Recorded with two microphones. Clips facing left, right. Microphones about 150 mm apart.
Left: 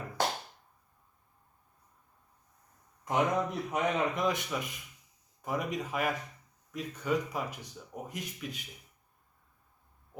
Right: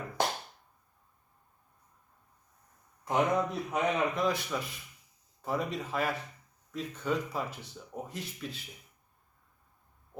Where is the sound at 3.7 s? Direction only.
15° left (ahead or behind).